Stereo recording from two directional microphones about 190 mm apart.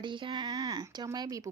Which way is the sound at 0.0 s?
25° right (ahead or behind).